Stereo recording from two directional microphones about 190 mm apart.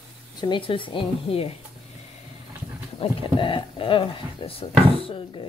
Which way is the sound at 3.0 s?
25° left (ahead or behind).